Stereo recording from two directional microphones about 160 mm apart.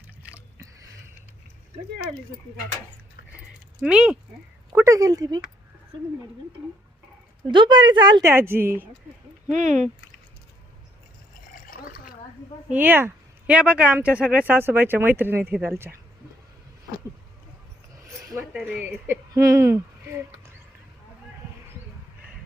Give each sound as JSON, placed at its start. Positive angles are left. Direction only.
{"t": 0.2, "sound": "a sound", "side_deg": -10}
{"t": 3.8, "sound": "speech", "side_deg": -5}
{"t": 4.8, "sound": "speech", "side_deg": -20}
{"t": 7.5, "sound": "speech", "side_deg": -30}
{"t": 8.3, "sound": "speech", "side_deg": -15}
{"t": 9.5, "sound": "speech", "side_deg": -50}
{"t": 11.5, "sound": "water", "side_deg": 65}
{"t": 12.6, "sound": "speech", "side_deg": -10}
{"t": 18.3, "sound": "speech", "side_deg": -10}